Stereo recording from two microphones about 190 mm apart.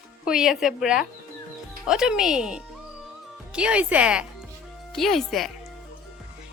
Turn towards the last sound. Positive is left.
turn(degrees=0)  # may be behind; listen again after turning